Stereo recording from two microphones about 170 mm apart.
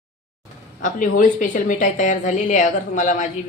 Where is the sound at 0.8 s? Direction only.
50° left (ahead or behind).